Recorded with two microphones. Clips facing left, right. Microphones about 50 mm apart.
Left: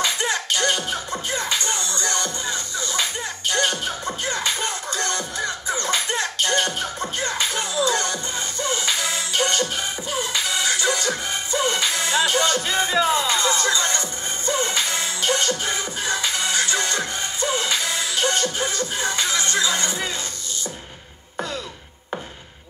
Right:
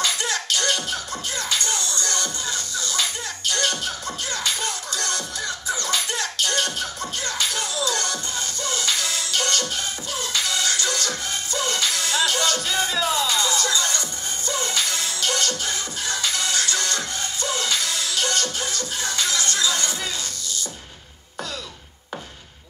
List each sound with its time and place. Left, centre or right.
0.0 s music: left